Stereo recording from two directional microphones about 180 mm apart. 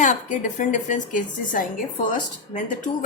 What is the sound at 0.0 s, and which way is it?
A woman's voice, 45° left (ahead or behind).